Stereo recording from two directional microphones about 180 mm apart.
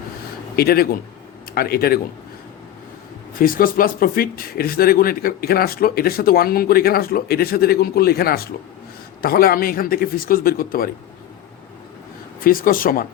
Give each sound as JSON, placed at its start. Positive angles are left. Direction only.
{"t": 0.5, "sound": "speech", "side_deg": 60}
{"t": 3.3, "sound": "speech", "side_deg": 50}
{"t": 12.5, "sound": "speech", "side_deg": 50}